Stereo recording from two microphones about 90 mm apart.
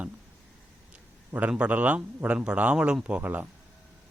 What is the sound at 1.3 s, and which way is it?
Speech, 15° right (ahead or behind).